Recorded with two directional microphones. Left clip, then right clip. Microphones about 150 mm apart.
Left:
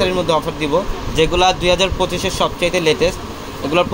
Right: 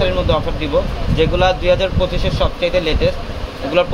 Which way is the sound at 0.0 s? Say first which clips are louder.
Left 1 dB; 75° left (ahead or behind).